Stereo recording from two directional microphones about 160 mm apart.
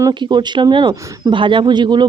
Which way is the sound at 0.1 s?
30° right (ahead or behind).